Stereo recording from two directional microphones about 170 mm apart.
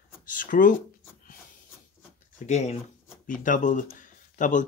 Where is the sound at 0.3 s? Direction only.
50° left (ahead or behind).